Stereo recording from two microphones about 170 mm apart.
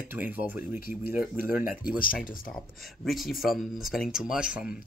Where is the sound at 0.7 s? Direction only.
60° left (ahead or behind).